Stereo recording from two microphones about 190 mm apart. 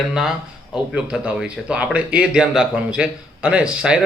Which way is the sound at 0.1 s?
5° right (ahead or behind).